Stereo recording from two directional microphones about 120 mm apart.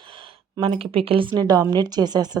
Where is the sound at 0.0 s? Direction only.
45° right (ahead or behind).